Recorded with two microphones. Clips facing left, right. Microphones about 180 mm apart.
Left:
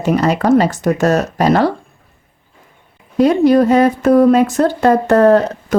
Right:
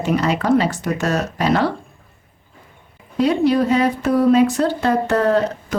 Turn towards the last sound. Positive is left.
turn(degrees=50)  # may be behind; listen again after turning